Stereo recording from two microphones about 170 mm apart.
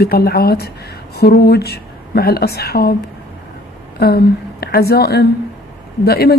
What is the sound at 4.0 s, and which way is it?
A woman's voice, 65° left (ahead or behind).